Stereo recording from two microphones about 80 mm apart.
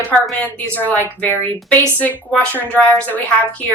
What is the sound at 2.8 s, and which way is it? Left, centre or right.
Speech, centre.